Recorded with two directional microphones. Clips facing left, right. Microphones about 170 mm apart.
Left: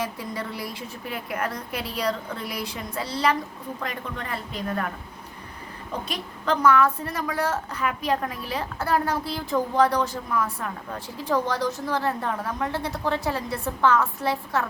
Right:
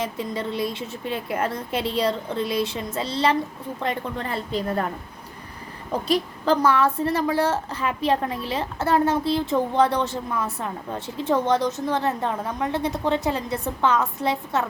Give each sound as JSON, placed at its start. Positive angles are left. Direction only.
{"t": 0.0, "sound": "a woman's voice", "side_deg": -25}
{"t": 6.1, "sound": "a woman's voice", "side_deg": -30}